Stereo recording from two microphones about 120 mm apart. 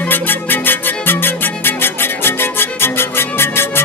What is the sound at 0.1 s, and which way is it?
Music, 15° left (ahead or behind).